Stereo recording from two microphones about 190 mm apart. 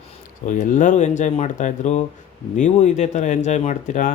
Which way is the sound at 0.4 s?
40° left (ahead or behind).